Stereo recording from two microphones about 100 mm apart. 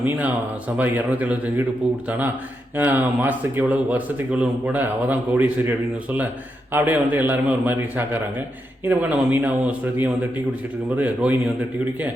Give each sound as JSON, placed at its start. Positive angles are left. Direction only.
{"t": 0.0, "sound": "a man's voice", "side_deg": -20}